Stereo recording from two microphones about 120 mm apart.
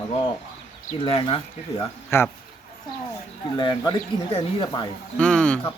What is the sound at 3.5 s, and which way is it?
Speech, 40° left (ahead or behind).